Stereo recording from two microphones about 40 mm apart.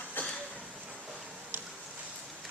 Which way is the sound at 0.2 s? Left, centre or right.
Left.